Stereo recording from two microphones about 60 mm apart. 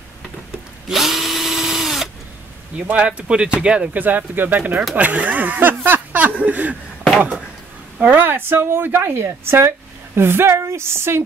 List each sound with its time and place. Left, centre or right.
0.8 s drill: centre
2.9 s speech: right
3.9 s speech: right
5.9 s a sound: right
8.1 s a woman's voice: right